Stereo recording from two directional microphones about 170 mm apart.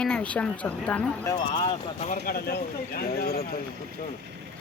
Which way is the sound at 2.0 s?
55° left (ahead or behind).